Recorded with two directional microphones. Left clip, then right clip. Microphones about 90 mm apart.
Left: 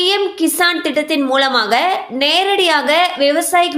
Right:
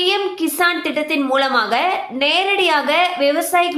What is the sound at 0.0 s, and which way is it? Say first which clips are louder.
A woman's voice: left 3 dB; 25° left (ahead or behind).